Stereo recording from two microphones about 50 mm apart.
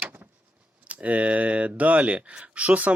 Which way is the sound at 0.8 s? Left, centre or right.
Right.